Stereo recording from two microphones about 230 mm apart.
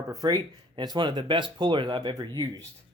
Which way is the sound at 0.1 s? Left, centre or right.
Centre.